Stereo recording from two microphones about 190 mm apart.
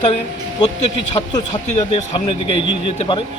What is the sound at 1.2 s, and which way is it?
A man's voice, 20° left (ahead or behind).